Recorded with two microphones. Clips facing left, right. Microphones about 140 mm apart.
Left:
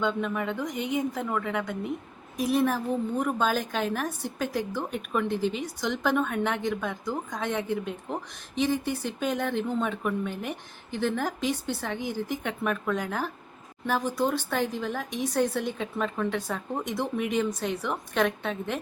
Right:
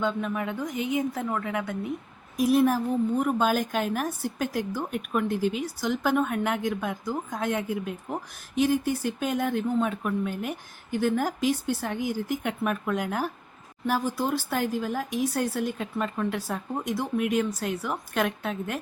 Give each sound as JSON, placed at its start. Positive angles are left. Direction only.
{"t": 0.0, "sound": "a woman's voice", "side_deg": -5}